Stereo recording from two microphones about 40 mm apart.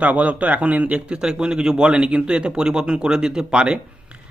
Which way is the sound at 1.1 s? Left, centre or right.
Right.